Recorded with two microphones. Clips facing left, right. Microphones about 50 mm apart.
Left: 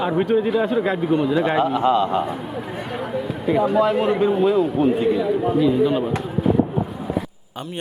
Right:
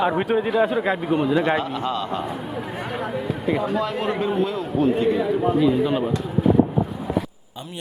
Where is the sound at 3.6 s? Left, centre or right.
Centre.